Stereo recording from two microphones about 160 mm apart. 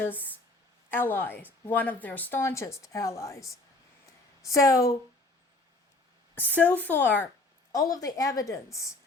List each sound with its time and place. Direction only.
0.0 s a woman's voice: 10° left (ahead or behind)
4.5 s a woman's voice: 20° left (ahead or behind)
6.5 s a woman's voice: 10° left (ahead or behind)
7.7 s a woman's voice: 20° left (ahead or behind)